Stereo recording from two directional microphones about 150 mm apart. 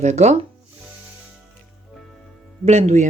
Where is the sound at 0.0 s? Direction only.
50° right (ahead or behind).